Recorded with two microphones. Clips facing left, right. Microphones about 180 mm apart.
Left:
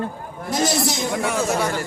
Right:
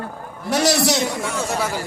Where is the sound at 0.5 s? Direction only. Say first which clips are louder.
Right 3 dB; 70° right (ahead or behind).